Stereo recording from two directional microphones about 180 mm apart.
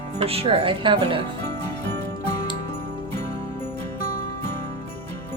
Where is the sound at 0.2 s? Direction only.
35° right (ahead or behind).